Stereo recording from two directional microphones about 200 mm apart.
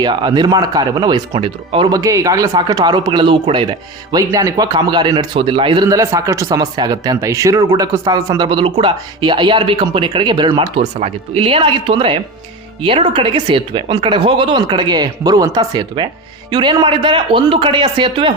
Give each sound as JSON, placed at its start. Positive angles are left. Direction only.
{"t": 0.0, "sound": "speech", "side_deg": -20}